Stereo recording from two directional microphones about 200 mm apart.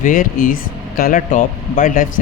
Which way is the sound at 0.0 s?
45° left (ahead or behind).